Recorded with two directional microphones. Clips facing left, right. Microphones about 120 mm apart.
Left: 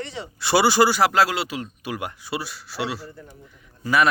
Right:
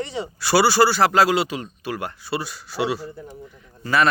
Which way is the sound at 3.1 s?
15° right (ahead or behind).